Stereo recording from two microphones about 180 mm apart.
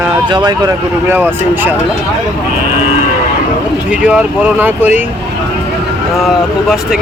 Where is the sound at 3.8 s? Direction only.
5° right (ahead or behind).